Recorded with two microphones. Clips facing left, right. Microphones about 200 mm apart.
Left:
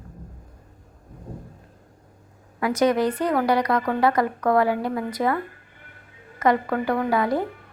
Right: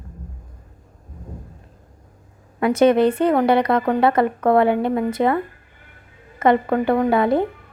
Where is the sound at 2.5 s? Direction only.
25° right (ahead or behind).